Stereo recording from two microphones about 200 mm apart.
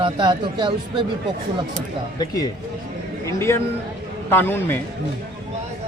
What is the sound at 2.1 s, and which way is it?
A man's voice, 20° left (ahead or behind).